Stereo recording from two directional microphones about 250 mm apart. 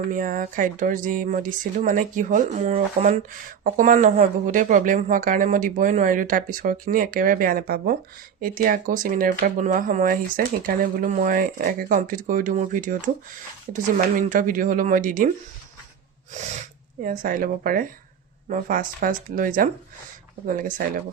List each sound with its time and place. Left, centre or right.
0.1 s speech: right
14.2 s speech: right
17.0 s speech: right